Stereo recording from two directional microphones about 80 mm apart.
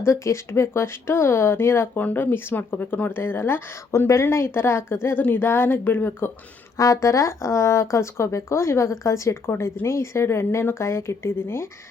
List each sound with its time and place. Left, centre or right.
0.0 s speech: left
6.7 s speech: left